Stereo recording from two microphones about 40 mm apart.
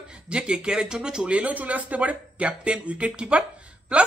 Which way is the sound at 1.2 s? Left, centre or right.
Right.